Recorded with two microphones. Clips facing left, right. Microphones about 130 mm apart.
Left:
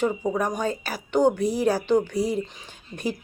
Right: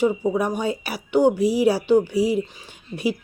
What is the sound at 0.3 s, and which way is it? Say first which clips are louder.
Speech: right 3 dB; 10° right (ahead or behind).